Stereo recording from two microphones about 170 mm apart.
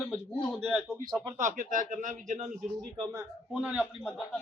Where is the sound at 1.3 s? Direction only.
50° right (ahead or behind).